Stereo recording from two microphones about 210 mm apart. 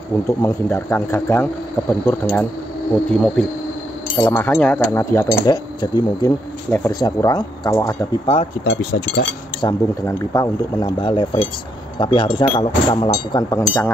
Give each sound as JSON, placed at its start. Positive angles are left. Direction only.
{"t": 0.4, "sound": "speech", "side_deg": 10}
{"t": 9.6, "sound": "speech", "side_deg": 15}